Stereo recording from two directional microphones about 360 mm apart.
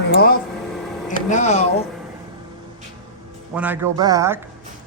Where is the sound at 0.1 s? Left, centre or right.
Left.